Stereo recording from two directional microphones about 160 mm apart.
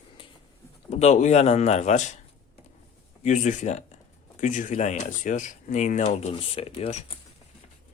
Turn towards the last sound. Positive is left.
turn(degrees=40)  # may be behind; listen again after turning